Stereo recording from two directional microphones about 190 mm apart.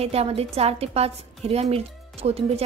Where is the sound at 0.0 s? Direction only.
30° right (ahead or behind).